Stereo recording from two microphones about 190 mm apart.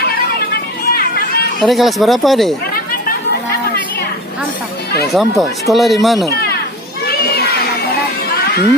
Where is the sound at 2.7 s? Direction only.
50° left (ahead or behind).